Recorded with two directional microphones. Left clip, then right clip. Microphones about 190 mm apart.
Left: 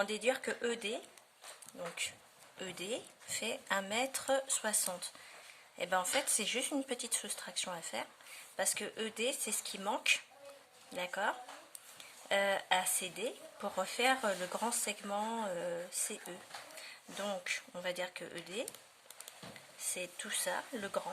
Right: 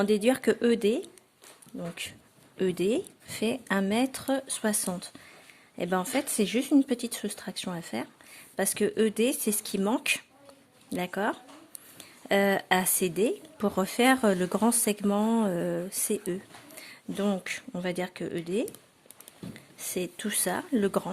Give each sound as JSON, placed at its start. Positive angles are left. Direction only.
{"t": 0.0, "sound": "speech", "side_deg": -40}
{"t": 19.5, "sound": "speech", "side_deg": -40}